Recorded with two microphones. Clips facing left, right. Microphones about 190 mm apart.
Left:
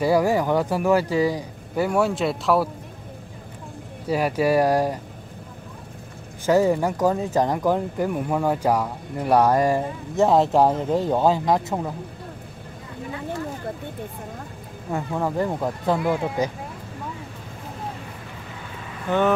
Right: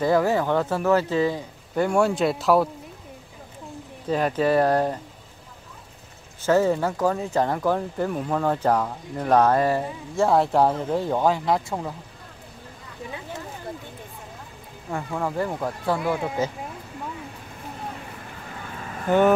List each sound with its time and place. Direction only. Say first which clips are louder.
0.0 s speech: left 1 dB; 10° left (ahead or behind)
4.1 s speech: left 1 dB; 10° left (ahead or behind)
6.4 s speech: left 1 dB; 15° left (ahead or behind)
15.3 s speech: left 2 dB; 20° left (ahead or behind)
19.1 s speech: right 3 dB; 10° right (ahead or behind)